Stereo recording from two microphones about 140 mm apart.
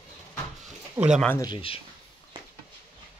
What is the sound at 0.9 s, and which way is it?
Speech, 10° right (ahead or behind).